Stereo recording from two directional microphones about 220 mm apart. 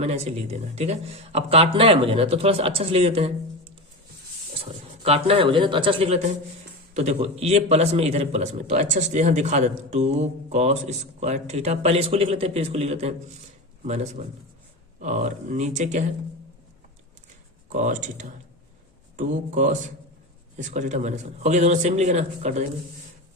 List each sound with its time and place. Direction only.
0.0 s a man's voice: 30° right (ahead or behind)
5.0 s a man's voice: 25° right (ahead or behind)
17.7 s a man's voice: 35° right (ahead or behind)